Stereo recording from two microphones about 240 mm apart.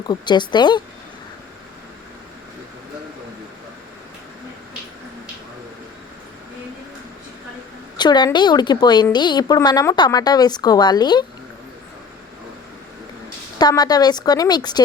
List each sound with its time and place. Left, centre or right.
0.1 s a woman's voice: centre
7.9 s a woman's voice: centre
13.6 s a woman's voice: centre